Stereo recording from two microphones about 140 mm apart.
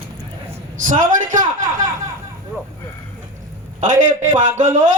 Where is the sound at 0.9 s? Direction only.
65° right (ahead or behind).